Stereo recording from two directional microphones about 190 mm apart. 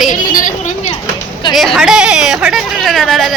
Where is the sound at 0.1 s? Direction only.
45° left (ahead or behind).